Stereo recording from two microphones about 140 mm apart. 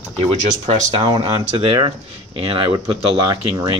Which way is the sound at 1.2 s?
40° right (ahead or behind).